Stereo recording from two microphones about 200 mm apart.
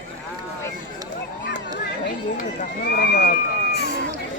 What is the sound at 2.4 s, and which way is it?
Speech, 45° left (ahead or behind).